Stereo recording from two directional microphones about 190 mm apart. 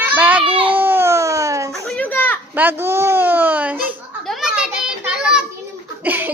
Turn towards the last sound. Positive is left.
turn(degrees=-10)  # may be behind; listen again after turning